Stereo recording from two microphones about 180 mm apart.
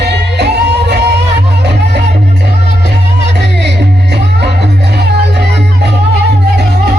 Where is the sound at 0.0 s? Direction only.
65° right (ahead or behind).